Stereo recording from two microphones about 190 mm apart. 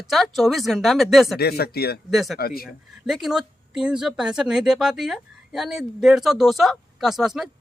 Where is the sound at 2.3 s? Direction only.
50° left (ahead or behind).